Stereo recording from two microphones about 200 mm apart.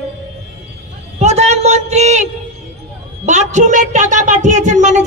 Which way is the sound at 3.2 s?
35° right (ahead or behind).